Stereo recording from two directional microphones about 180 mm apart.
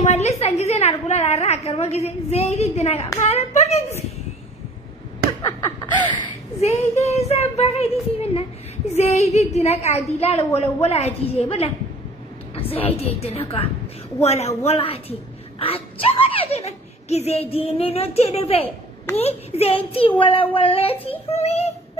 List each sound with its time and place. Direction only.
0.0 s a woman's voice: 40° left (ahead or behind)
7.0 s a woman's voice: 40° left (ahead or behind)
12.5 s a sound: 30° left (ahead or behind)
12.9 s a woman's voice: 35° left (ahead or behind)